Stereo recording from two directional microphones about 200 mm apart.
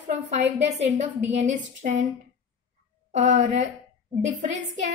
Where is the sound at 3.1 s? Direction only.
35° right (ahead or behind).